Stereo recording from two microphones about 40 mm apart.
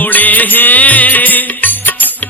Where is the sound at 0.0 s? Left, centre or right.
Left.